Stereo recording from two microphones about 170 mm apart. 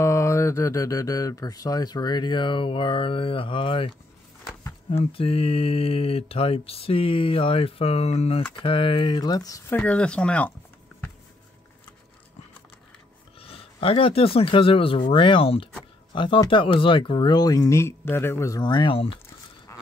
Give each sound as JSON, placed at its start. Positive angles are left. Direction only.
{"t": 0.0, "sound": "speech", "side_deg": 15}
{"t": 4.9, "sound": "mantra", "side_deg": 35}
{"t": 8.6, "sound": "speech", "side_deg": 30}
{"t": 9.8, "sound": "speech", "side_deg": 5}
{"t": 13.4, "sound": "speech", "side_deg": 35}
{"t": 19.7, "sound": "a sound", "side_deg": 15}